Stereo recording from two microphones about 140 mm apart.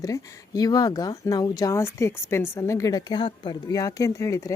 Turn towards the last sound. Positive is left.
turn(degrees=20)  # may be behind; listen again after turning